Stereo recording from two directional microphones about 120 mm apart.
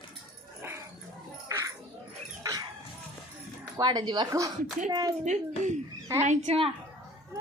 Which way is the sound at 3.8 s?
35° right (ahead or behind).